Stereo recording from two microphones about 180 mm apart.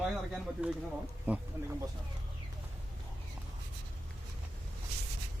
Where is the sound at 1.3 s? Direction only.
10° right (ahead or behind).